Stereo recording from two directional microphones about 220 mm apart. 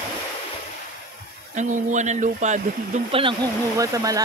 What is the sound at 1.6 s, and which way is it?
Speech, 35° right (ahead or behind).